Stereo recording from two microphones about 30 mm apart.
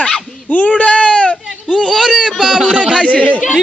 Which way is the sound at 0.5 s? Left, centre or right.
Left.